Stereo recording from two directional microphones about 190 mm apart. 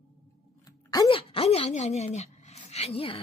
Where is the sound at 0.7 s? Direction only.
20° left (ahead or behind).